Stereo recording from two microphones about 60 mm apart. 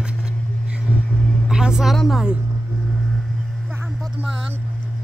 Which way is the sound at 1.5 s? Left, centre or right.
Centre.